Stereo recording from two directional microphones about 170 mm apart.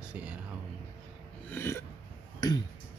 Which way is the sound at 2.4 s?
25° left (ahead or behind).